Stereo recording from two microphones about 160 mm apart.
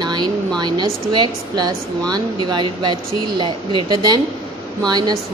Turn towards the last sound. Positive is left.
turn(degrees=-25)  # may be behind; listen again after turning